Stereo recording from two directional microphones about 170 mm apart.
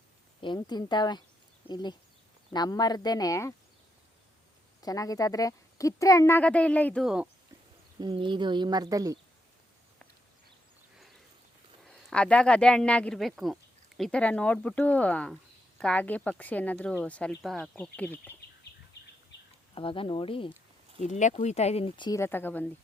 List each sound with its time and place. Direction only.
0.4 s speech: 25° left (ahead or behind)
4.8 s speech: 20° left (ahead or behind)
7.0 s speech: 5° right (ahead or behind)
7.9 s speech: 25° right (ahead or behind)
11.9 s speech: 5° left (ahead or behind)
19.7 s speech: 30° left (ahead or behind)
21.0 s speech: 45° left (ahead or behind); by 22.2 s 25° left (ahead or behind)
22.2 s speech: 10° left (ahead or behind)